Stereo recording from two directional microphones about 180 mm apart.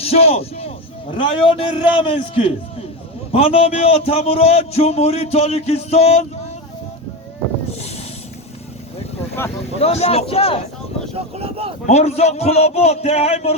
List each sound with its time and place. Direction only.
0.0 s a man's voice: 35° left (ahead or behind)
7.8 s a sound: 35° left (ahead or behind)
9.4 s speech: 15° left (ahead or behind)
9.8 s a man's voice: 35° left (ahead or behind)
11.3 s speech: 30° right (ahead or behind)
11.9 s a man's voice: 35° left (ahead or behind)